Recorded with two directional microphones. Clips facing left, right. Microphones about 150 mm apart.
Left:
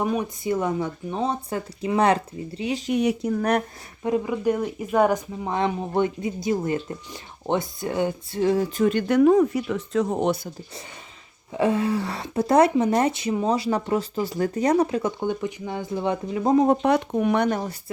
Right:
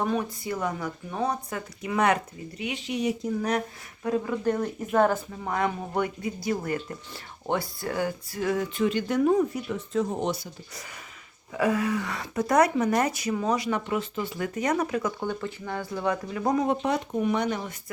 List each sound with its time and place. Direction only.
0.0 s speech: 10° left (ahead or behind)
0.4 s speech: 20° left (ahead or behind)
2.9 s speech: 65° left (ahead or behind)
4.0 s speech: 15° left (ahead or behind); by 8.7 s 30° left (ahead or behind)
8.8 s speech: 55° left (ahead or behind)
11.5 s speech: 25° left (ahead or behind)
16.8 s speech: 65° left (ahead or behind)
17.6 s speech: 35° left (ahead or behind)